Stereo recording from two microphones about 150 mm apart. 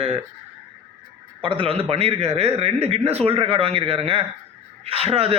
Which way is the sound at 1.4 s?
35° right (ahead or behind).